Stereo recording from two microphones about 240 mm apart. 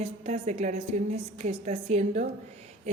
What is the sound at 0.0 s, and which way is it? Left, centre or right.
A woman's voice, right.